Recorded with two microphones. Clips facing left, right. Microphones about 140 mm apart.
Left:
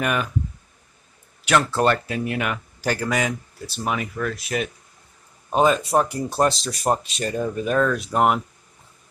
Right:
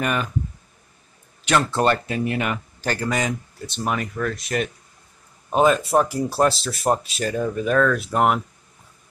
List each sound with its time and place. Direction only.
0.0 s speech: 5° left (ahead or behind)
1.4 s speech: 5° left (ahead or behind)